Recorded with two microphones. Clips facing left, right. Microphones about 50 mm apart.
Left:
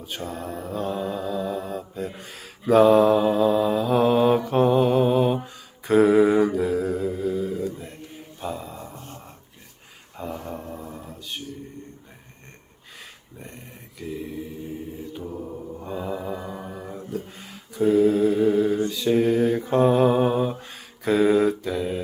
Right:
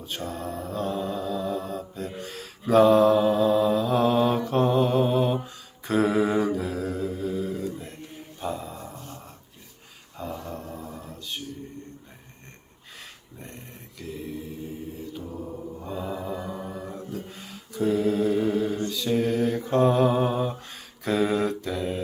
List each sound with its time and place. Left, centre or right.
0.0 s mantra: centre
7.7 s a sound: centre
9.0 s a sound: left
10.3 s mantra: left
10.8 s music: centre
13.4 s mantra: centre